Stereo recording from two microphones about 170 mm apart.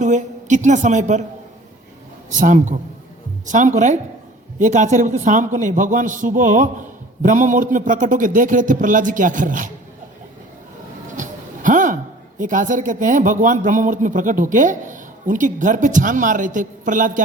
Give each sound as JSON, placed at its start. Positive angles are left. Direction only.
{"t": 0.0, "sound": "a woman's voice", "side_deg": -45}
{"t": 2.3, "sound": "speech", "side_deg": -50}
{"t": 11.2, "sound": "a sound", "side_deg": -50}
{"t": 12.4, "sound": "speech", "side_deg": -50}